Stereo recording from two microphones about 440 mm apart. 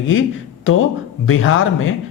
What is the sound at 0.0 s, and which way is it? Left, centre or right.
Speech, left.